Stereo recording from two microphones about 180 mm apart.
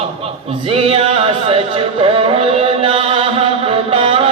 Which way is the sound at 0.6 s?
30° right (ahead or behind).